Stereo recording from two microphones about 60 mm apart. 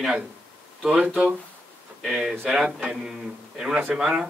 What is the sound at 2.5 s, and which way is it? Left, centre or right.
Speech, centre.